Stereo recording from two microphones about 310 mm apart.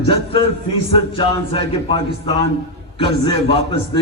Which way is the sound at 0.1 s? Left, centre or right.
Centre.